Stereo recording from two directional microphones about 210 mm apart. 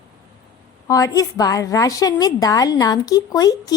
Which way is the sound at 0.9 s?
15° left (ahead or behind).